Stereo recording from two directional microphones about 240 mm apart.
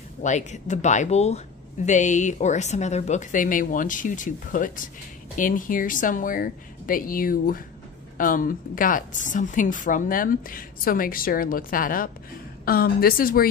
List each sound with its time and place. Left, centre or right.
0.2 s a woman's voice: left